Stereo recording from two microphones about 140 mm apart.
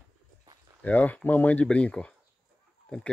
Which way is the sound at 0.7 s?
10° left (ahead or behind).